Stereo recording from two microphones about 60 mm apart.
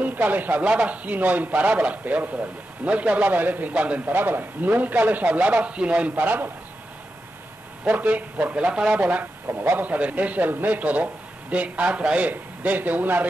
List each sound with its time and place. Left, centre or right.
0.0 s a man's voice: right
7.8 s a man's voice: right
9.5 s a man's voice: right
9.8 s a man's voice: right